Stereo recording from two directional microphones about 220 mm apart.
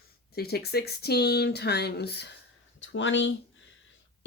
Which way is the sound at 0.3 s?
45° left (ahead or behind).